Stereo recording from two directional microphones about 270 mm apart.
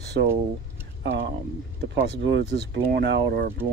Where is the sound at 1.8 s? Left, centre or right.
Right.